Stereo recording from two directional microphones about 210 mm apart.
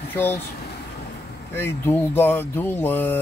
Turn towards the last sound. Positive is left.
turn(degrees=10)  # may be behind; listen again after turning